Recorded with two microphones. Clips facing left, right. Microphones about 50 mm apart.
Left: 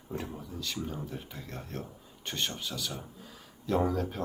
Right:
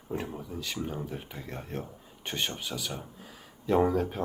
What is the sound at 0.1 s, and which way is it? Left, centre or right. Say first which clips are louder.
Speech: right 3 dB; centre.